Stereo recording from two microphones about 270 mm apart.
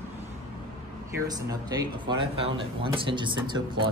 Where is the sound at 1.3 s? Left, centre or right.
Centre.